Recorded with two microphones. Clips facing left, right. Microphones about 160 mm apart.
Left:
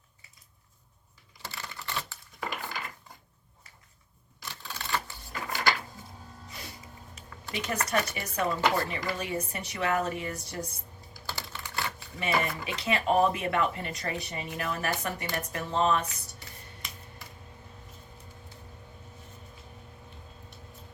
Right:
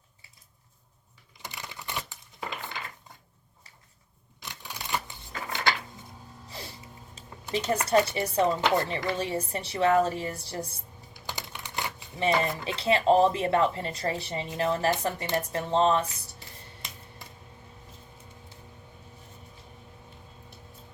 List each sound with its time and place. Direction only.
1.4 s typewriter: 20° right (ahead or behind)
4.4 s typewriter: 15° right (ahead or behind)
6.5 s music: 30° right (ahead or behind)
7.2 s a sound: 20° right (ahead or behind)
7.9 s speech: 30° right (ahead or behind)
11.1 s computer keyboard: 20° right (ahead or behind)
12.4 s speech: 30° right (ahead or behind)